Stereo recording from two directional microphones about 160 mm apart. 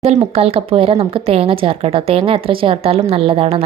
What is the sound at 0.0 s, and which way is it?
Speech, 40° right (ahead or behind).